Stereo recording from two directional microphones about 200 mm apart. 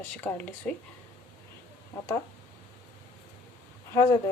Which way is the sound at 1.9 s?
10° left (ahead or behind).